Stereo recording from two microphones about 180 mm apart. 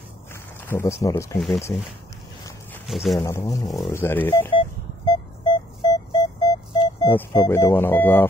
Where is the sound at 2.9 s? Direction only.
Centre (ahead or behind).